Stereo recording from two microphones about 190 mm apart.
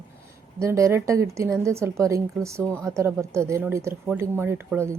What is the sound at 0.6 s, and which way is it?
Speech, 15° right (ahead or behind).